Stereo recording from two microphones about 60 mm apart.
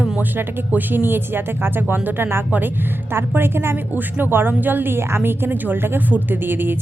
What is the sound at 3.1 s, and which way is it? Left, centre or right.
A woman's voice, right.